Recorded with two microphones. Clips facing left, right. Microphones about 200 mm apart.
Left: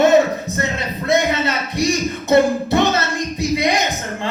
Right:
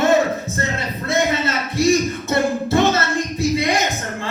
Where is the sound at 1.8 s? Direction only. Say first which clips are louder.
Right 4 dB; 15° left (ahead or behind).